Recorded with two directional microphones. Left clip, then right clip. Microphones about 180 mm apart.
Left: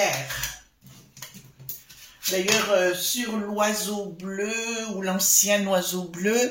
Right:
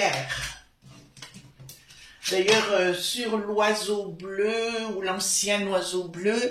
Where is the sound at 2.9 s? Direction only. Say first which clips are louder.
Right 1 dB; 40° left (ahead or behind).